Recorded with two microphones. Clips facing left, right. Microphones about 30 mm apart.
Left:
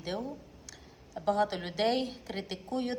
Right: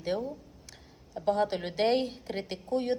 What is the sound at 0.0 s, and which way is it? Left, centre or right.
A woman's voice, centre.